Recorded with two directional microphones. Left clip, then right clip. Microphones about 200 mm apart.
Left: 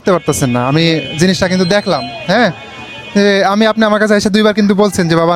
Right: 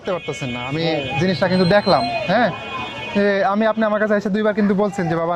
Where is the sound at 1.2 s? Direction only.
40° left (ahead or behind).